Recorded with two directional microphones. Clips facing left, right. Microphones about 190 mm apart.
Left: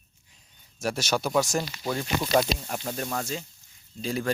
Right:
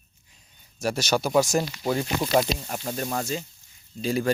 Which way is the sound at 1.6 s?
20° right (ahead or behind).